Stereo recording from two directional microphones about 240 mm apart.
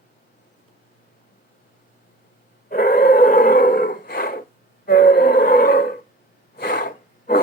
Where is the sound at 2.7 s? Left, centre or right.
Left.